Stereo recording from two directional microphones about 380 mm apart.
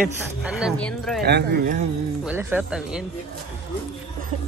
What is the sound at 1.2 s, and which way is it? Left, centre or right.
Speech, right.